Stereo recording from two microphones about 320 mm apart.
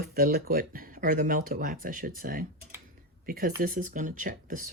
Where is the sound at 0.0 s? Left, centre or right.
Right.